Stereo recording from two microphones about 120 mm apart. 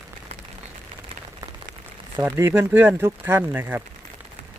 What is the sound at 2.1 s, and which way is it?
Speech, 25° right (ahead or behind).